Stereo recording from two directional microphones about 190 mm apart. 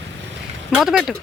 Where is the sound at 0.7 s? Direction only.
5° right (ahead or behind).